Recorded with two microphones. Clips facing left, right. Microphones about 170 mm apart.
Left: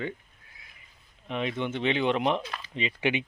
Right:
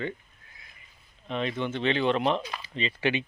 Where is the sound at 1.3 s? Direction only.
10° left (ahead or behind).